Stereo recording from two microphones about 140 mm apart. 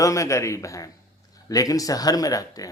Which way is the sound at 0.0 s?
20° left (ahead or behind).